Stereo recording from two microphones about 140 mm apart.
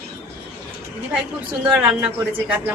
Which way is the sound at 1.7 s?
5° right (ahead or behind).